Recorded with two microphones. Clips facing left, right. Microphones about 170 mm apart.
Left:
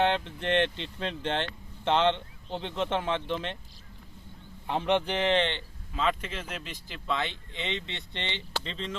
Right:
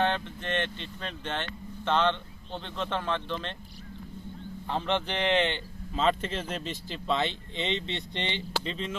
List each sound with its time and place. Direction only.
0.0 s speech: 25° left (ahead or behind)
4.7 s speech: 15° left (ahead or behind); by 5.5 s 5° right (ahead or behind)
6.0 s speech: 30° right (ahead or behind); by 9.0 s 10° right (ahead or behind)